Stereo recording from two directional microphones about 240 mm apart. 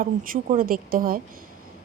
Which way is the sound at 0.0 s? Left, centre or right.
Right.